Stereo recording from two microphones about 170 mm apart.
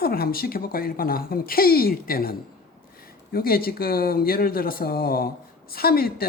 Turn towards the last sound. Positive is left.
turn(degrees=65)  # may be behind; listen again after turning